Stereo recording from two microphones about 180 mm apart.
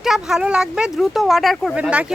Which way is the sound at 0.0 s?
Centre (ahead or behind).